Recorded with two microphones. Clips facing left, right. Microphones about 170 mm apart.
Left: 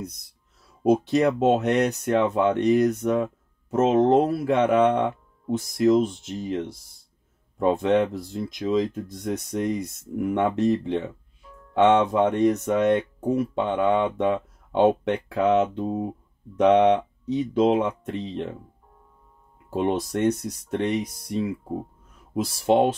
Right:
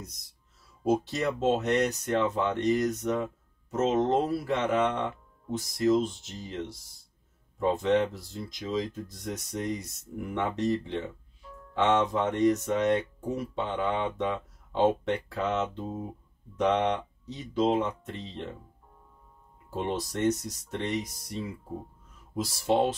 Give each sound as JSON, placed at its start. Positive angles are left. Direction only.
{"t": 0.8, "sound": "speech", "side_deg": 65}
{"t": 19.7, "sound": "speech", "side_deg": 60}